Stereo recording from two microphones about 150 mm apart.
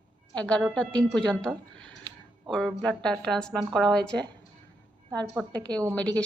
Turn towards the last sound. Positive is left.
turn(degrees=10)  # may be behind; listen again after turning